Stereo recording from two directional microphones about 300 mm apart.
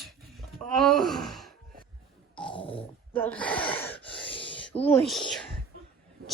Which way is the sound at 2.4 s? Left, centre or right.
Centre.